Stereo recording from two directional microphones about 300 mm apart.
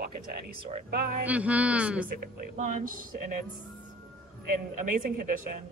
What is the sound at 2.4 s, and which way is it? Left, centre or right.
Speech, right.